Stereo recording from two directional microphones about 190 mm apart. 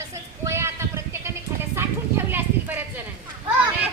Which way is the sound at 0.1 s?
15° right (ahead or behind).